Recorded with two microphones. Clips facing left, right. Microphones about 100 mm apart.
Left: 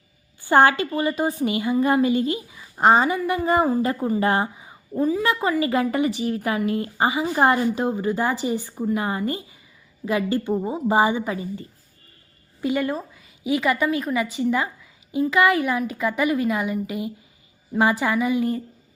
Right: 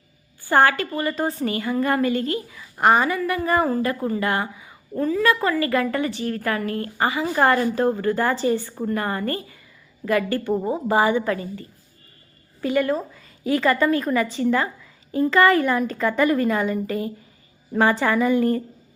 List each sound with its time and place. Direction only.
0.4 s a woman's voice: 20° left (ahead or behind)
12.6 s speech: 20° left (ahead or behind)
13.1 s a woman's voice: 10° left (ahead or behind)